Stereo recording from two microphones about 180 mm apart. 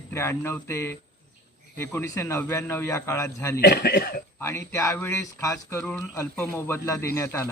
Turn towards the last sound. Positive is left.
turn(degrees=15)  # may be behind; listen again after turning